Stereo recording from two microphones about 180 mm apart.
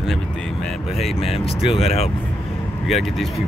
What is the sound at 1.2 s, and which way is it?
Speech, 30° left (ahead or behind).